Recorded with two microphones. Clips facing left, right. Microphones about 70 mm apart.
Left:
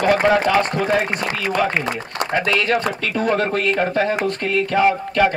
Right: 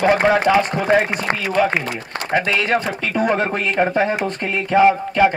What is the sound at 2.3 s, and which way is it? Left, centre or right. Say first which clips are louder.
A man's voice: right 1 dB; centre.